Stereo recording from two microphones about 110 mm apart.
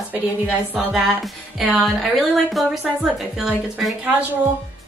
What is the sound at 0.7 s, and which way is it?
Speech, 5° right (ahead or behind).